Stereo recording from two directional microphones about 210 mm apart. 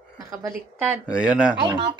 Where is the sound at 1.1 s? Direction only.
5° right (ahead or behind).